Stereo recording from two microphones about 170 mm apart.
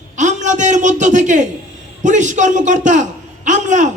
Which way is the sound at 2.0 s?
45° right (ahead or behind).